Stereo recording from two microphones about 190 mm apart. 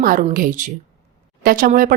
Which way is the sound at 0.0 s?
50° right (ahead or behind).